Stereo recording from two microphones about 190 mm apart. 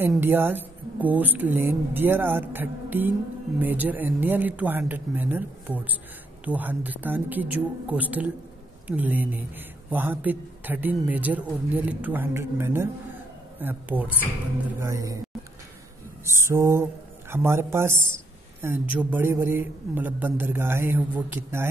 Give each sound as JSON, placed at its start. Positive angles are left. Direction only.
{"t": 0.2, "sound": "speech", "side_deg": -10}
{"t": 16.3, "sound": "speech", "side_deg": -15}